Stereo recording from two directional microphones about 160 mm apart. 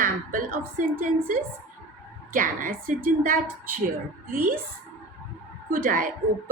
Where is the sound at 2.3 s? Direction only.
60° right (ahead or behind).